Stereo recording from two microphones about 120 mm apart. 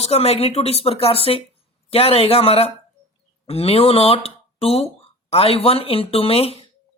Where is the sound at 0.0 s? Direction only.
55° left (ahead or behind).